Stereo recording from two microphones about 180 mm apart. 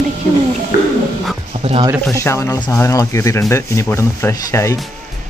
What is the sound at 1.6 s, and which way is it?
Music, 35° right (ahead or behind).